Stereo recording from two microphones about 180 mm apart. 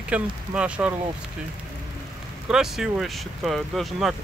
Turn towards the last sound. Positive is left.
turn(degrees=0)  # may be behind; listen again after turning